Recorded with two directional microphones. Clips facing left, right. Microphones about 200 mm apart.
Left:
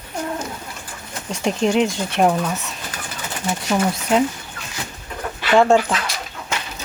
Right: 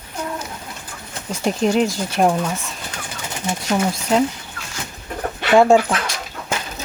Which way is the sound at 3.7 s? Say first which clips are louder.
Even; centre (ahead or behind).